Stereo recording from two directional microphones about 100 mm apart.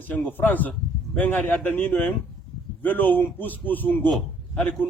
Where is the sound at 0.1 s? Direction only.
20° left (ahead or behind).